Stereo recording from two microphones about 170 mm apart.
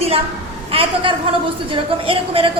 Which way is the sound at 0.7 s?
35° right (ahead or behind).